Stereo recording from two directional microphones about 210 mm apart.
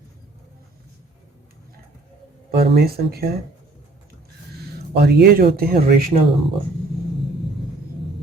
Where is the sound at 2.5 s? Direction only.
50° right (ahead or behind).